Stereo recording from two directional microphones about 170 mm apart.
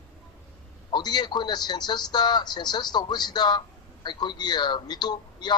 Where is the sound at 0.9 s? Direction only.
25° left (ahead or behind).